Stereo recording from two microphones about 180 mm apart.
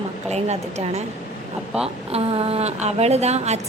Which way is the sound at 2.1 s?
35° right (ahead or behind).